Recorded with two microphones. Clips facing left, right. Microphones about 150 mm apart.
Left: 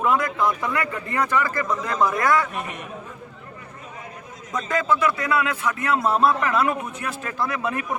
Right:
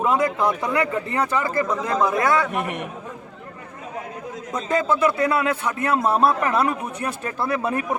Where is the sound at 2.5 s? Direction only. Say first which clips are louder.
Right 6 dB; 65° right (ahead or behind).